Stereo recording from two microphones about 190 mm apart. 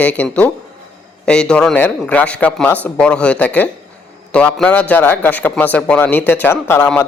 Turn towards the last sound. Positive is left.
turn(degrees=10)  # may be behind; listen again after turning